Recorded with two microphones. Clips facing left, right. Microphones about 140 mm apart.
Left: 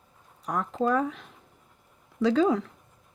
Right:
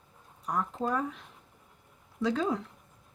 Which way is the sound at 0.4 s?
90° left.